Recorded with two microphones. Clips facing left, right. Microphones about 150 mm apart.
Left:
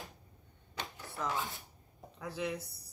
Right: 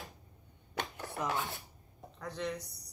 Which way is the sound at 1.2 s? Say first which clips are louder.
Right 1 dB; 15° right (ahead or behind).